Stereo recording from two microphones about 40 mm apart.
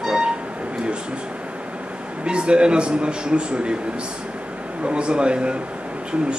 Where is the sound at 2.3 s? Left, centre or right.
Right.